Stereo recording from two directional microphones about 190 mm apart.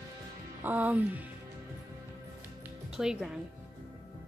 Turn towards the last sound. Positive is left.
turn(degrees=-5)  # may be behind; listen again after turning